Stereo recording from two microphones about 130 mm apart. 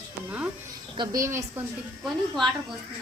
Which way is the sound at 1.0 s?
25° right (ahead or behind).